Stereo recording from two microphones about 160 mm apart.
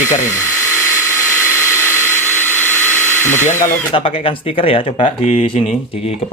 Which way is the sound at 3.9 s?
35° left (ahead or behind).